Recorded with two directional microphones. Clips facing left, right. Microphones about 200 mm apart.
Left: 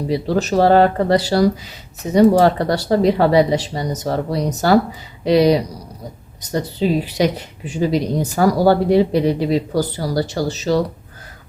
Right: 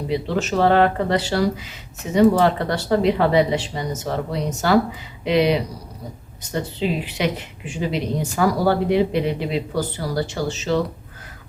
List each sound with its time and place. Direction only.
0.1 s speech: 40° left (ahead or behind)